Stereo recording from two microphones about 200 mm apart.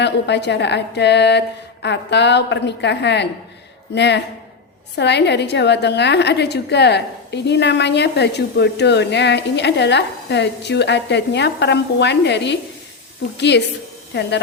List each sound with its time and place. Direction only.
0.0 s a woman's voice: 60° left (ahead or behind)